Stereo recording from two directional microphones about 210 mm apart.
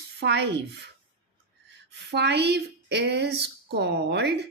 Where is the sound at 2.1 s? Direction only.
55° right (ahead or behind).